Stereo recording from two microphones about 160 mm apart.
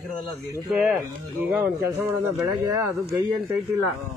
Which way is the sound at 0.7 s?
5° right (ahead or behind).